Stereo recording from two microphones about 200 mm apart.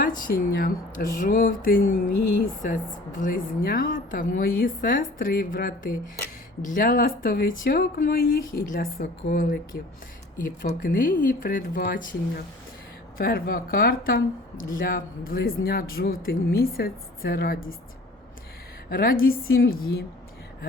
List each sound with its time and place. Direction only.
0.2 s speech: 45° left (ahead or behind)
18.9 s speech: 45° left (ahead or behind)